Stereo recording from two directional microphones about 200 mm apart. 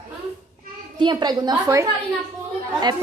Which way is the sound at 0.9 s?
20° right (ahead or behind).